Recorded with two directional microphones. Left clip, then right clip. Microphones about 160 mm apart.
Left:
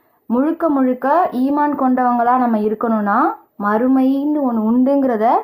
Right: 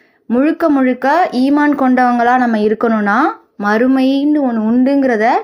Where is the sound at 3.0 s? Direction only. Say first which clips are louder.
Right 2 dB; 20° right (ahead or behind).